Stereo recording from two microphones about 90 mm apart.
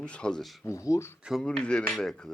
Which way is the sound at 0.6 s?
35° left (ahead or behind).